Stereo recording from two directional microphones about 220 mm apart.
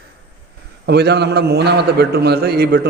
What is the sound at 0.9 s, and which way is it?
A man's voice, 50° right (ahead or behind).